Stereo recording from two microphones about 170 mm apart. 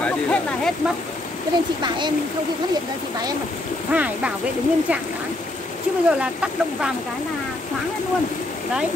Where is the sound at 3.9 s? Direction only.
10° right (ahead or behind).